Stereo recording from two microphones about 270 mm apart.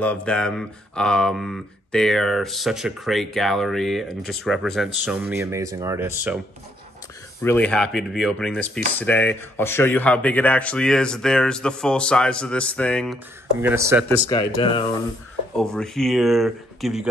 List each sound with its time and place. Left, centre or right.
0.0 s speech: centre
7.4 s speech: centre
14.2 s speech: centre
15.5 s speech: centre